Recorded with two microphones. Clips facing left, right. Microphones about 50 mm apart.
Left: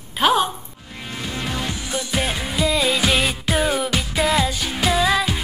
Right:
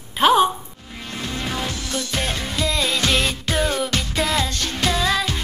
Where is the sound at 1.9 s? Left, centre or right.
Centre.